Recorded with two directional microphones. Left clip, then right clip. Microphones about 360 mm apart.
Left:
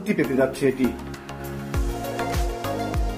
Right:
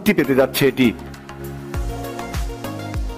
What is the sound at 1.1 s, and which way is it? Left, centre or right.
Music, centre.